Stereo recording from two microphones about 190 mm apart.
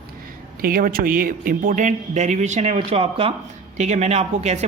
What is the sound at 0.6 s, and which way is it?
Speech, 50° right (ahead or behind).